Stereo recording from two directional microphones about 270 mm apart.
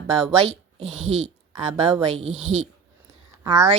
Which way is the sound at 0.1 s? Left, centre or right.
Right.